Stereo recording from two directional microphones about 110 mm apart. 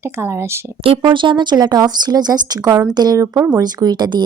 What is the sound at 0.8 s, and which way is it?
Speech, 60° right (ahead or behind).